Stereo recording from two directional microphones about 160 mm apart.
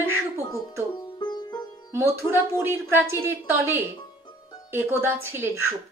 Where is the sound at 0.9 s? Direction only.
25° left (ahead or behind).